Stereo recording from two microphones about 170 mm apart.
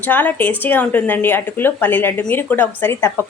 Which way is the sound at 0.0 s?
10° left (ahead or behind).